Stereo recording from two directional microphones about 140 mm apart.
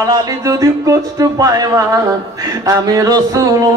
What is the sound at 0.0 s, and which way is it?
Music, 25° right (ahead or behind).